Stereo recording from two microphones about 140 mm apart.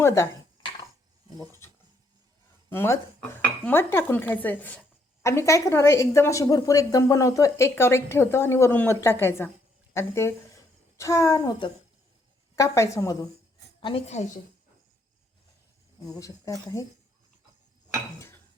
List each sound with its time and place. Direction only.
0.0 s a woman's voice: 20° left (ahead or behind)
2.6 s a woman's voice: 15° left (ahead or behind)
13.8 s a woman's voice: 45° left (ahead or behind)
16.0 s a woman's voice: 25° left (ahead or behind)